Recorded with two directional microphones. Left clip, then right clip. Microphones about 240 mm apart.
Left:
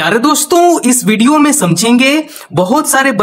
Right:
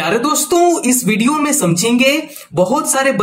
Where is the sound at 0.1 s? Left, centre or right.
Left.